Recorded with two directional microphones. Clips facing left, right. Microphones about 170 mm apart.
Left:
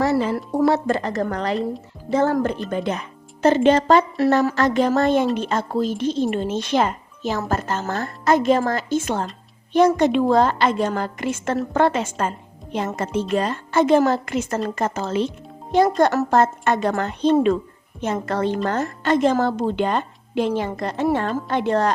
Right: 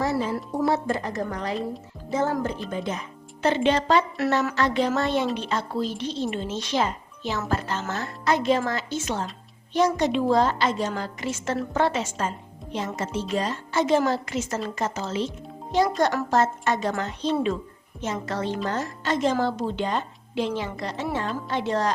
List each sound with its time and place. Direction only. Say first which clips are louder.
0.0 s a woman's voice: left 5 dB; 80° left
3.4 s a woman's voice: left 6 dB; 45° left (ahead or behind)